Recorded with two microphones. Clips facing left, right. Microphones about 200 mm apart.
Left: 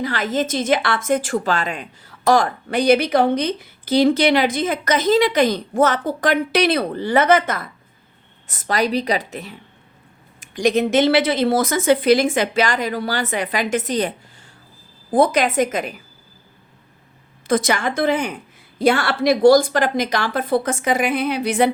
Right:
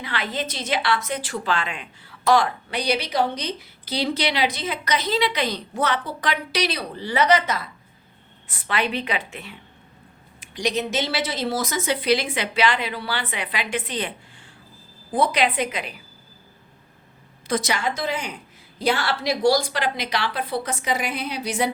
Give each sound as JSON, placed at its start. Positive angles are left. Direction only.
{"t": 0.0, "sound": "a woman's voice", "side_deg": 45}
{"t": 15.1, "sound": "a woman's voice", "side_deg": 45}
{"t": 17.4, "sound": "a woman's voice", "side_deg": 50}